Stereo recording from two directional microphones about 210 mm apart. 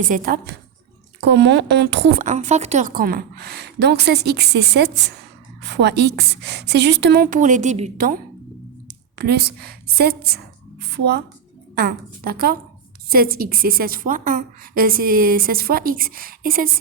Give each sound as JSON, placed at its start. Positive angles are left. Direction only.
{"t": 0.0, "sound": "a woman's voice", "side_deg": -40}
{"t": 2.2, "sound": "a woman's voice", "side_deg": -35}